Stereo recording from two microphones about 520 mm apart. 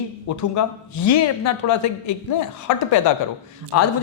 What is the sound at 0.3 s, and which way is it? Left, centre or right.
A man's voice, left.